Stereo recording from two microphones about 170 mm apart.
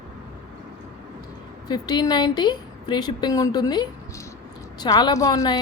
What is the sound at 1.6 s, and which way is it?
A woman's voice, 25° left (ahead or behind).